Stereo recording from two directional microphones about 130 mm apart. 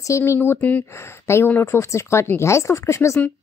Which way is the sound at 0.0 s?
20° left (ahead or behind).